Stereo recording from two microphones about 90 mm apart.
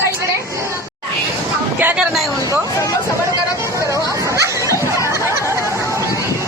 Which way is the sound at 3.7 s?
35° right (ahead or behind).